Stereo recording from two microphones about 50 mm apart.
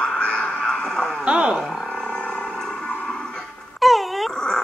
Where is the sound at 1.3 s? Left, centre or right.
Centre.